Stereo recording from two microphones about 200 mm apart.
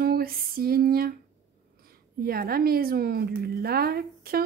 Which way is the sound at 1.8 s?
50° right (ahead or behind).